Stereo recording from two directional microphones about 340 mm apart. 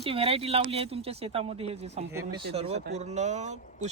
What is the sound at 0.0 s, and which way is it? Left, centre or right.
Speech, centre.